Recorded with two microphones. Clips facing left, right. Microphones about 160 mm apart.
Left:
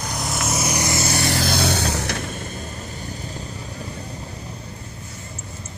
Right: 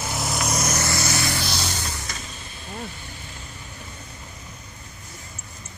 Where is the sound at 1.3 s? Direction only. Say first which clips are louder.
Left 7 dB; 55° left (ahead or behind).